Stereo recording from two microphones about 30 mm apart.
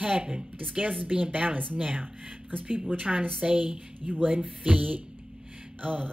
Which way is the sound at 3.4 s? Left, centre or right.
Right.